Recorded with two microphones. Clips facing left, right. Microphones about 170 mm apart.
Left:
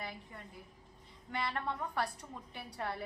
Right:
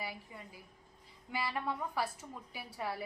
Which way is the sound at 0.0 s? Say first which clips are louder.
Right 1 dB; 5° right (ahead or behind).